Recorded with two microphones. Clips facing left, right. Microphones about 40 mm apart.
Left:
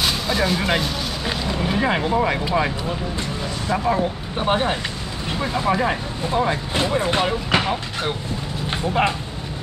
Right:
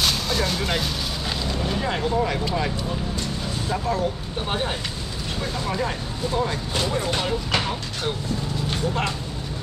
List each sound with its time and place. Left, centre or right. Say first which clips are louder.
0.0 s speech: left 2 dB; centre
3.7 s speech: left 4 dB; left
8.6 s a sound: left 6 dB; left